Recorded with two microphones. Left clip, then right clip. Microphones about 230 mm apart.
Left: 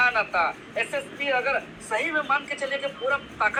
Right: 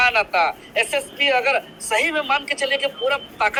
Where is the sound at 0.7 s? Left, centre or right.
Right.